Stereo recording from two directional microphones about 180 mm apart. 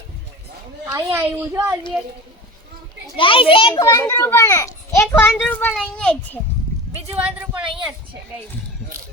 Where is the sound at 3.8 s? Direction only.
15° left (ahead or behind).